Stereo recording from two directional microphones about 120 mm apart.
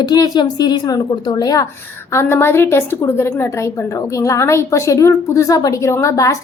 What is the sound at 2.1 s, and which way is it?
A woman's voice, 20° left (ahead or behind).